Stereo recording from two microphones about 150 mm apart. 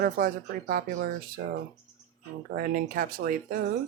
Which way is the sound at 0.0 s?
70° right (ahead or behind).